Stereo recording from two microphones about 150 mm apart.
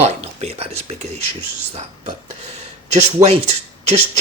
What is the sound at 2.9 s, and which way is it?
Speech, 45° right (ahead or behind).